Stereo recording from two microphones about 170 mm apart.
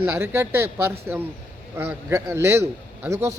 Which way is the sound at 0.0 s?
15° right (ahead or behind).